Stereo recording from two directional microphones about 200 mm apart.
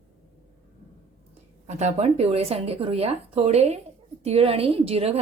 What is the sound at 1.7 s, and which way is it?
A woman's voice, 35° right (ahead or behind).